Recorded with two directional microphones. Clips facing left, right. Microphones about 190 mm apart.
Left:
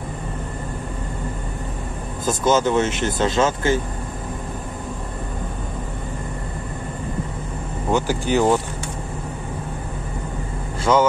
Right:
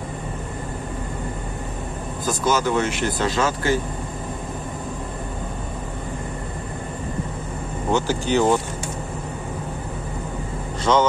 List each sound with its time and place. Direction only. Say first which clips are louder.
2.2 s speech: left 3 dB; 25° left (ahead or behind)
7.9 s speech: left 1 dB; 15° left (ahead or behind)
10.9 s speech: left 1 dB; 5° left (ahead or behind)